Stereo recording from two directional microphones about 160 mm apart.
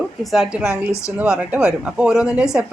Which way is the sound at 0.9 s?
20° left (ahead or behind).